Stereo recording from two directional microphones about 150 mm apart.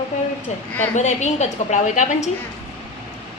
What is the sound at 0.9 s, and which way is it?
A woman's voice, 50° left (ahead or behind).